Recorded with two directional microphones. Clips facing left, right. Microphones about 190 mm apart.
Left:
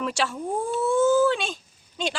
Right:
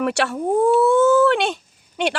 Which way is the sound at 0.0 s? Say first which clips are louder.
Right 6 dB; 65° right (ahead or behind).